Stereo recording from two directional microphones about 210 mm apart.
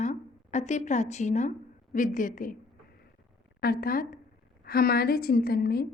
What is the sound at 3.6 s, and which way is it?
A woman's voice, 45° left (ahead or behind).